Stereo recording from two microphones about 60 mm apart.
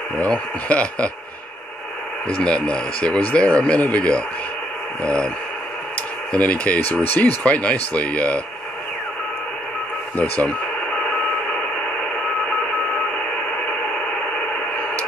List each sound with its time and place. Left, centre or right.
0.2 s speech: left
2.2 s speech: centre
6.3 s speech: left
10.1 s speech: left